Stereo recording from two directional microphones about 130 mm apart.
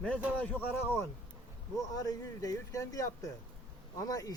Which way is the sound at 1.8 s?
25° left (ahead or behind).